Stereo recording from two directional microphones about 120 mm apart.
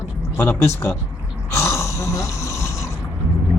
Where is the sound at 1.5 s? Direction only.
25° left (ahead or behind).